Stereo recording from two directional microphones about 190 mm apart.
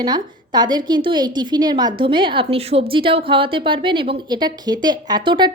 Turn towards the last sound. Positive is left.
turn(degrees=-25)  # may be behind; listen again after turning